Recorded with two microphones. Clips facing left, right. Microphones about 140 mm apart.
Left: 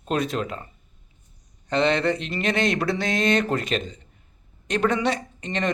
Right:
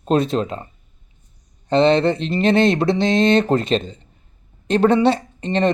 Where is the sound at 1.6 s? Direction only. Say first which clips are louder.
Right 7 dB; 30° right (ahead or behind).